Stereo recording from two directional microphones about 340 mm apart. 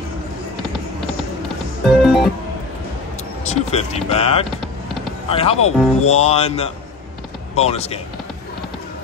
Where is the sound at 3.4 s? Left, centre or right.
Centre.